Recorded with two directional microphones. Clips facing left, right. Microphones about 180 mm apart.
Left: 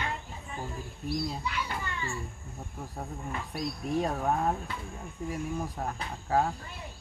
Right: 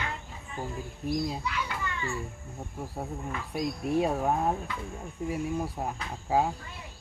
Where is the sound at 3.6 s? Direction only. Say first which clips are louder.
Right 4 dB; 10° right (ahead or behind).